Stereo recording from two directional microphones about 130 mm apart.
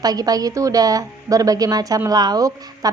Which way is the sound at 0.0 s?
30° right (ahead or behind).